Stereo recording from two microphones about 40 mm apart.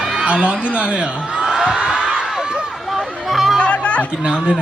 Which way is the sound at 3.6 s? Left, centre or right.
Left.